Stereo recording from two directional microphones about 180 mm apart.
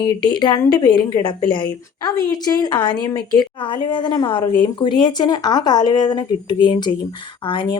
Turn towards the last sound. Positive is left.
turn(degrees=25)  # may be behind; listen again after turning